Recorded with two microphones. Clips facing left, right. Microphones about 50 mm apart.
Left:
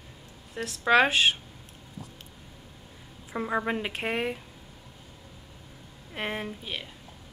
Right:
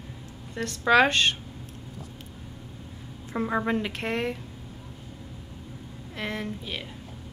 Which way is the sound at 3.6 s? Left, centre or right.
Centre.